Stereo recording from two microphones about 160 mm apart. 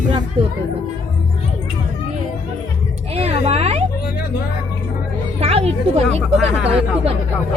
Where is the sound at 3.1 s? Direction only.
40° right (ahead or behind).